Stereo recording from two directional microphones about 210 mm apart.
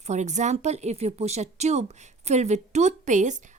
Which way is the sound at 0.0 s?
35° right (ahead or behind).